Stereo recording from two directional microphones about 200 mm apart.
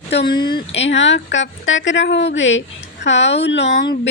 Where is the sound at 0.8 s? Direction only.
65° left (ahead or behind).